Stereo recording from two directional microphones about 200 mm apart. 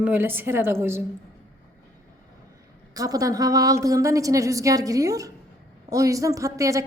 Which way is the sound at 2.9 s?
15° right (ahead or behind).